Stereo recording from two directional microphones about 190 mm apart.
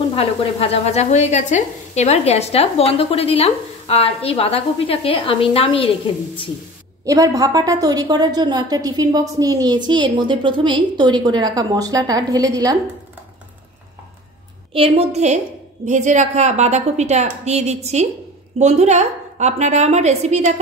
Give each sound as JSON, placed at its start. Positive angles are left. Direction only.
{"t": 0.1, "sound": "speech", "side_deg": 30}
{"t": 7.1, "sound": "a child's voice", "side_deg": -20}
{"t": 14.7, "sound": "a woman's voice", "side_deg": -30}